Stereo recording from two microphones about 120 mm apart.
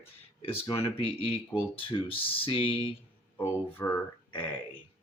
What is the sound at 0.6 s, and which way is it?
Speech, 25° left (ahead or behind).